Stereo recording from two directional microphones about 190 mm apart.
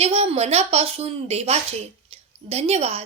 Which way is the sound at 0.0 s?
30° right (ahead or behind).